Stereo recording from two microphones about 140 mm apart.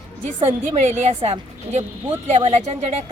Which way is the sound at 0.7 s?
55° right (ahead or behind).